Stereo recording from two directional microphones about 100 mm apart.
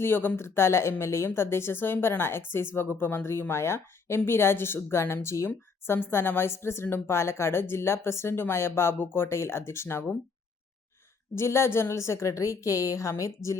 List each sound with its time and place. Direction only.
0.0 s a woman's voice: 20° left (ahead or behind)
11.3 s a woman's voice: 25° left (ahead or behind)